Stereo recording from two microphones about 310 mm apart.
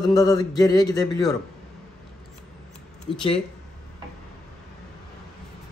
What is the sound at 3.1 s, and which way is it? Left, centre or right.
Speech, centre.